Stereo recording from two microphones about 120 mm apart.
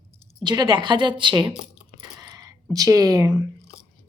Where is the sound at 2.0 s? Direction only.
35° right (ahead or behind).